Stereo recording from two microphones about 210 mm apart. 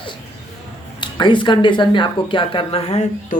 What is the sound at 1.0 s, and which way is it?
Speech, 20° left (ahead or behind).